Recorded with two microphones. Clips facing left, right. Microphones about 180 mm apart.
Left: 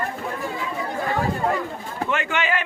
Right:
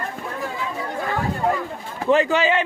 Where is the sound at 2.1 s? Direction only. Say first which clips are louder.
Right 8 dB; 35° right (ahead or behind).